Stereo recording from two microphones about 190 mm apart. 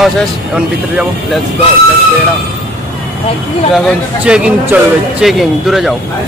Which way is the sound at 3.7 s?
5° right (ahead or behind).